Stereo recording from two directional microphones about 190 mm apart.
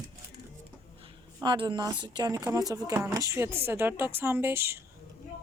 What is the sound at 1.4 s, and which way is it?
Speech, 25° right (ahead or behind).